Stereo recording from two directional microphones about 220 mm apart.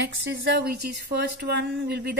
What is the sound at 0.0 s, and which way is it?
Speech, 50° right (ahead or behind).